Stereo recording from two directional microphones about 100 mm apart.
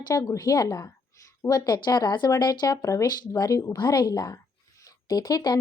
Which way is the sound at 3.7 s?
45° left (ahead or behind).